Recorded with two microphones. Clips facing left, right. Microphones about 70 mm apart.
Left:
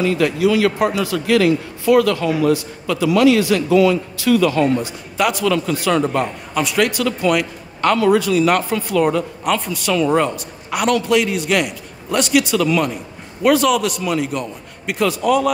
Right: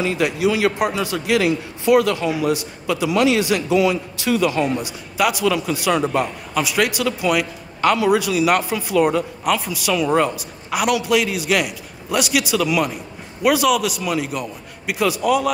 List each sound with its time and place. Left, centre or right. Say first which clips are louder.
0.0 s a man's voice: left 3 dB; centre